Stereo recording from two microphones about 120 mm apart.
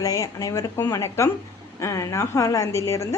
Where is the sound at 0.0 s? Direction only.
30° left (ahead or behind).